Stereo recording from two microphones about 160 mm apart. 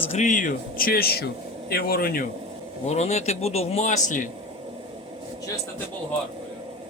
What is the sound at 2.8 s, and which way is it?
Speech, 45° left (ahead or behind).